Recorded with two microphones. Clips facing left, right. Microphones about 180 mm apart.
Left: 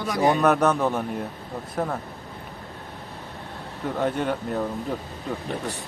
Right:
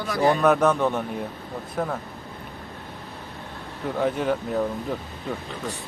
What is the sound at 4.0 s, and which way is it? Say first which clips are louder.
Speech: right 2 dB; centre (ahead or behind).